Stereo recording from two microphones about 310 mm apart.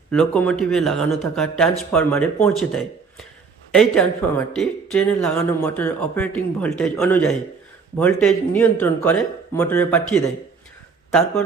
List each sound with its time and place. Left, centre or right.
0.1 s speech: centre